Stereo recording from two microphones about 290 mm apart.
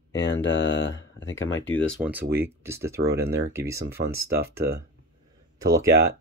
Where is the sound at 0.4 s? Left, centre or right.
Left.